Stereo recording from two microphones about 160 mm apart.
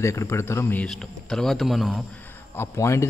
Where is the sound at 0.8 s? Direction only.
Centre (ahead or behind).